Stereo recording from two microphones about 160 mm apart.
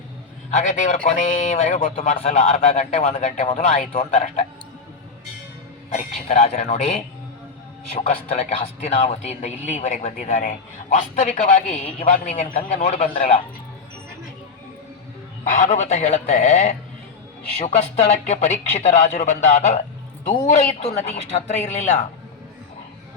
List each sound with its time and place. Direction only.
0.5 s a man's voice: 50° left (ahead or behind)
5.9 s a man's voice: 40° left (ahead or behind)
15.5 s a man's voice: 50° left (ahead or behind)